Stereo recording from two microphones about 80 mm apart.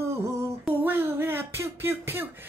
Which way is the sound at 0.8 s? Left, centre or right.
Right.